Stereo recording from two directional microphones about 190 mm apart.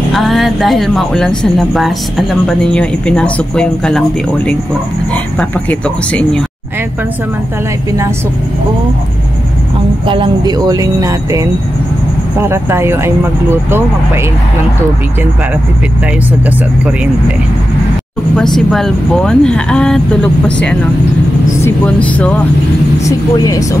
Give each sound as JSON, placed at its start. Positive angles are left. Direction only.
{"t": 0.1, "sound": "speech", "side_deg": 0}
{"t": 5.1, "sound": "speech", "side_deg": 5}
{"t": 10.0, "sound": "speech", "side_deg": -25}
{"t": 16.4, "sound": "speech", "side_deg": -5}
{"t": 18.3, "sound": "speech", "side_deg": 0}
{"t": 23.0, "sound": "speech", "side_deg": 20}